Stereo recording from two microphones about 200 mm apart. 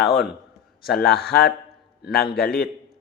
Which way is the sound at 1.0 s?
55° left (ahead or behind).